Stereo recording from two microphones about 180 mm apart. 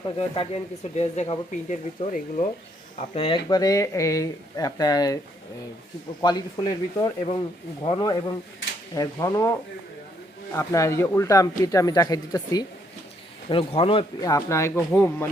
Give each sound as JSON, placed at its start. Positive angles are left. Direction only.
{"t": 0.2, "sound": "speech", "side_deg": 35}
{"t": 3.2, "sound": "speech", "side_deg": 30}
{"t": 6.2, "sound": "speech", "side_deg": 20}
{"t": 10.5, "sound": "speech", "side_deg": 15}
{"t": 14.2, "sound": "speech", "side_deg": 20}